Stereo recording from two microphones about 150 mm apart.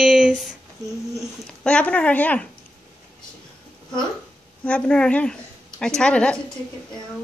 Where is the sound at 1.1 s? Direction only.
5° left (ahead or behind).